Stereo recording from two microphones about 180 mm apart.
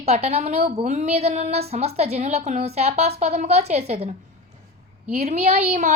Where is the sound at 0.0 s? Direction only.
35° right (ahead or behind).